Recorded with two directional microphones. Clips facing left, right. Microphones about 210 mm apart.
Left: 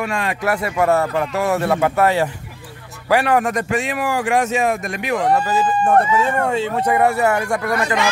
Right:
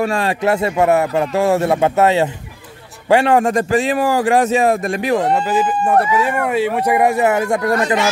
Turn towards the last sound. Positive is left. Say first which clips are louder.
# right 4 dB
turn(degrees=-25)  # may be behind; listen again after turning